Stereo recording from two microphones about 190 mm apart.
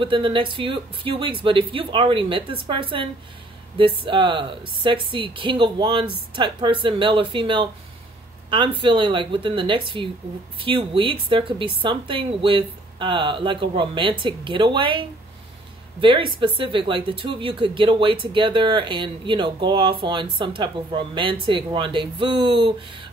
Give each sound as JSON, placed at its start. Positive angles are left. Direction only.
{"t": 0.0, "sound": "speech", "side_deg": -25}